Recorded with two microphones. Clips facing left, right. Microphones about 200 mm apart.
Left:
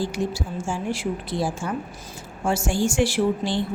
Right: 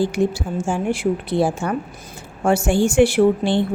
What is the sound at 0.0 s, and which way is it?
Speech, 55° right (ahead or behind).